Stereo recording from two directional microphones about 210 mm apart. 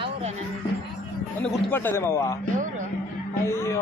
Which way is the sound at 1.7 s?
10° left (ahead or behind).